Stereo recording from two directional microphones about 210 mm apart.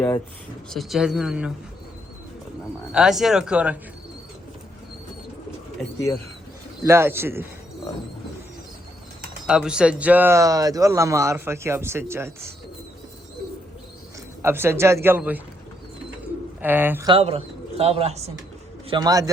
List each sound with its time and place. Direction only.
0.7 s speech: centre (ahead or behind)
2.9 s speech: centre (ahead or behind)
6.8 s speech: 10° right (ahead or behind)
9.5 s speech: 5° right (ahead or behind)
14.4 s speech: 10° right (ahead or behind)
16.6 s speech: 10° right (ahead or behind)
17.1 s speech: 25° right (ahead or behind)
18.9 s speech: 20° right (ahead or behind)